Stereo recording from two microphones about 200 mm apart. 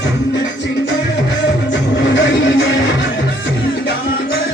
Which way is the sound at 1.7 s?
60° left (ahead or behind).